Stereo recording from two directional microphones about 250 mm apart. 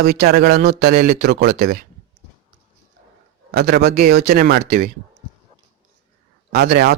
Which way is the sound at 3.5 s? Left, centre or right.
Right.